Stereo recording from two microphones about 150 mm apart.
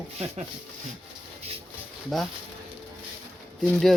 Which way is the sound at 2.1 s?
Centre (ahead or behind).